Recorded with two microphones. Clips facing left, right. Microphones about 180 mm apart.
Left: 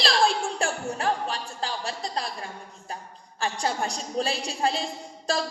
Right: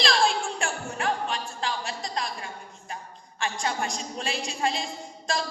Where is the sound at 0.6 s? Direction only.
35° left (ahead or behind).